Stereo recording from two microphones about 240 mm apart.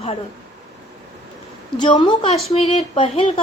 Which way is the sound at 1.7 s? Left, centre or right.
Left.